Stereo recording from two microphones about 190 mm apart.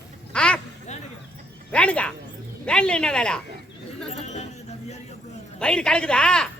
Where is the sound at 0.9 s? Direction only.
35° left (ahead or behind).